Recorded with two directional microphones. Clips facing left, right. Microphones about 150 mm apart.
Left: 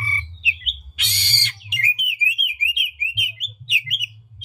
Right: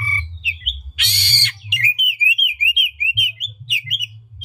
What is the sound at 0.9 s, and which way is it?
Bird, 80° right.